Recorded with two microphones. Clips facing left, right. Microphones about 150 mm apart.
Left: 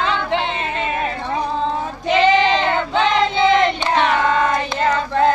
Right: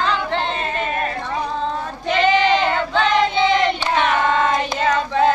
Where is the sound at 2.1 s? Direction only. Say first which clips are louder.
Left 1 dB; 20° left (ahead or behind).